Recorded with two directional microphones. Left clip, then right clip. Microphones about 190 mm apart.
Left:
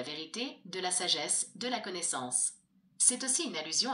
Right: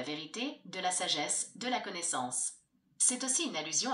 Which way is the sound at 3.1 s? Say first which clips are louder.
Even; 50° left (ahead or behind).